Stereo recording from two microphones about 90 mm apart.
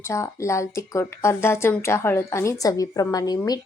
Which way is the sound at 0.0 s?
35° left (ahead or behind).